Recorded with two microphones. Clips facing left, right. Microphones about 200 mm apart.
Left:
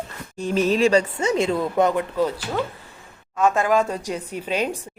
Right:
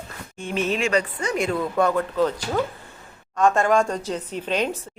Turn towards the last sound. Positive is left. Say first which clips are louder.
# even
turn(degrees=10)  # may be behind; listen again after turning